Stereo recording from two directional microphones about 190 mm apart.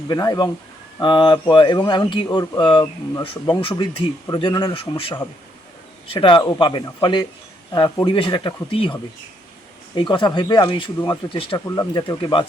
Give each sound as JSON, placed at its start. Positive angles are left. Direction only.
{"t": 0.1, "sound": "speech", "side_deg": 20}